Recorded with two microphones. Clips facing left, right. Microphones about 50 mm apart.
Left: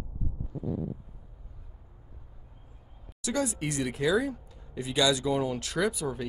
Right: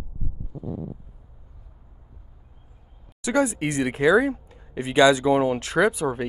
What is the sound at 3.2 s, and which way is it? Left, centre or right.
Speech, right.